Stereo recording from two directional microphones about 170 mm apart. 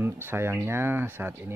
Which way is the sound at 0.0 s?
15° right (ahead or behind).